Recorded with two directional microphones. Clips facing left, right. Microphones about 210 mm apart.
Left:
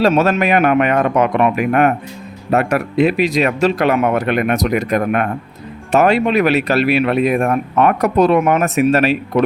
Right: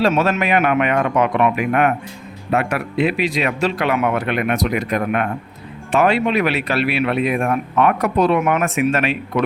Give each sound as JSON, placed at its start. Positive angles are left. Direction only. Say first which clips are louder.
{"t": 0.0, "sound": "speech", "louder": "left 3 dB", "side_deg": 40}